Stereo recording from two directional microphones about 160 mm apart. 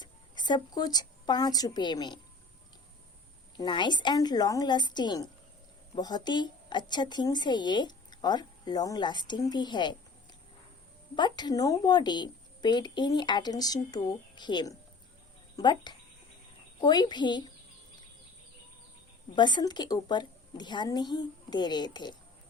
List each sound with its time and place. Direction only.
0.0 s a woman's voice: 25° left (ahead or behind)
3.6 s a woman's voice: 30° left (ahead or behind)
11.1 s a woman's voice: 30° left (ahead or behind)
19.4 s a woman's voice: 25° left (ahead or behind)